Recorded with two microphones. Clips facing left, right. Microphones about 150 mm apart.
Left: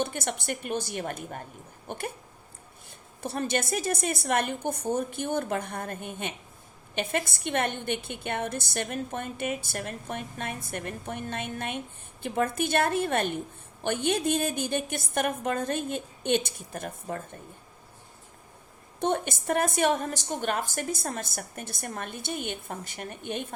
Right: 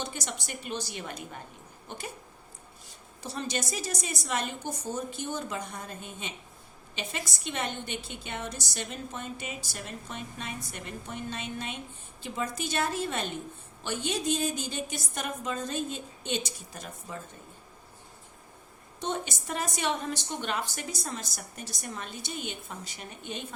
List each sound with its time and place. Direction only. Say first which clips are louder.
0.0 s a woman's voice: left 6 dB; 55° left (ahead or behind)
3.2 s a woman's voice: left 5 dB; 55° left (ahead or behind)
18.9 s a woman's voice: left 6 dB; 55° left (ahead or behind)